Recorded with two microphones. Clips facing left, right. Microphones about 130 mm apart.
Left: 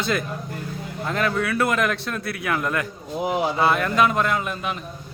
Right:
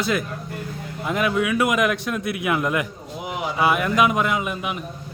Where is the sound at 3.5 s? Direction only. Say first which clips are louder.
Right 3 dB; 10° right (ahead or behind).